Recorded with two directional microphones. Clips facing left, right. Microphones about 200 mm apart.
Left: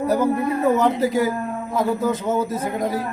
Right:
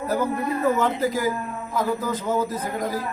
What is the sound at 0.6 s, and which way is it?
A man's voice, 25° left (ahead or behind).